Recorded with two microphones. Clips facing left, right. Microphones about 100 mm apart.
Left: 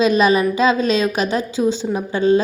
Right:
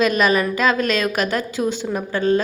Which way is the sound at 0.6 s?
50° right (ahead or behind).